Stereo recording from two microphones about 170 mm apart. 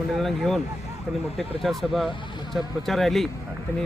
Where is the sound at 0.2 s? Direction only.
Centre (ahead or behind).